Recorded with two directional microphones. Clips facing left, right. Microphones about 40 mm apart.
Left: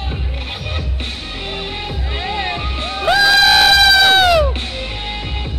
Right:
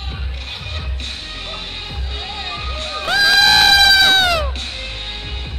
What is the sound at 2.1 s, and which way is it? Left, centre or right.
Music, left.